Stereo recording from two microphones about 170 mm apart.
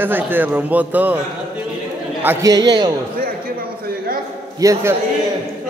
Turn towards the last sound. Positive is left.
turn(degrees=-20)  # may be behind; listen again after turning